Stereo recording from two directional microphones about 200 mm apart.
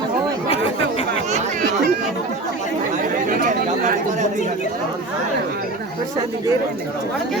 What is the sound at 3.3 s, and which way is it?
Speech, 45° right (ahead or behind).